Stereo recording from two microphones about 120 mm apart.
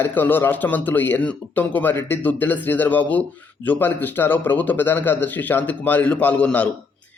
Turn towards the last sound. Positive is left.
turn(degrees=10)  # may be behind; listen again after turning